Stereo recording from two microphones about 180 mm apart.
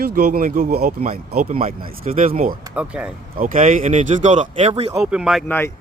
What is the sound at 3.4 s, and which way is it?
Speech, 45° right (ahead or behind).